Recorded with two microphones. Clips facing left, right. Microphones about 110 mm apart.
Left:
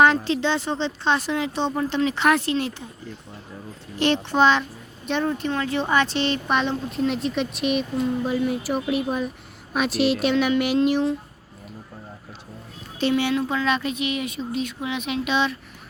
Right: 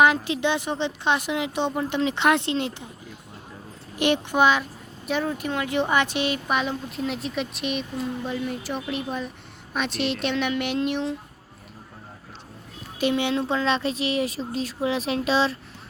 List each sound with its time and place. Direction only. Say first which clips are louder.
0.0 s a woman's voice: left 1 dB; 10° right (ahead or behind)
3.9 s a woman's voice: left 1 dB; 15° right (ahead or behind)
5.5 s a woman's voice: left 1 dB; 15° right (ahead or behind); by 11.1 s centre (ahead or behind)
13.0 s speech: left 2 dB; 15° right (ahead or behind)